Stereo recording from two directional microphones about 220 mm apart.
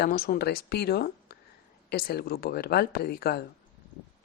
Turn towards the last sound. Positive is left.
turn(degrees=45)  # may be behind; listen again after turning